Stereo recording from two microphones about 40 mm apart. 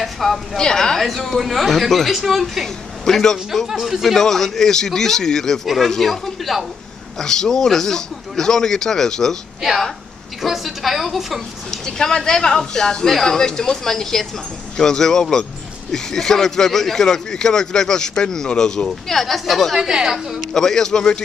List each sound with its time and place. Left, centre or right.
0.0 s speech: centre
0.6 s speech: centre
1.0 s speech: centre
3.2 s speech: centre
3.8 s speech: centre
4.2 s speech: centre
7.2 s speech: centre
10.4 s speech: centre
11.7 s speech: centre
18.9 s speech: centre
19.8 s a woman's voice: centre
20.5 s speech: centre